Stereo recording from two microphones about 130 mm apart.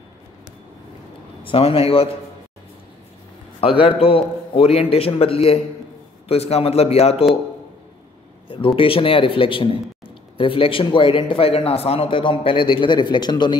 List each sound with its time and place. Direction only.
1.4 s speech: 45° left (ahead or behind)
3.6 s speech: 45° left (ahead or behind)
8.5 s speech: 40° left (ahead or behind)